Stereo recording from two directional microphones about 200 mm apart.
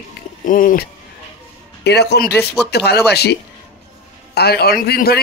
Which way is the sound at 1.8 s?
55° left (ahead or behind).